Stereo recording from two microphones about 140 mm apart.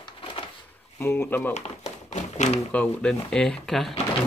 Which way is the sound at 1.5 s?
55° left (ahead or behind).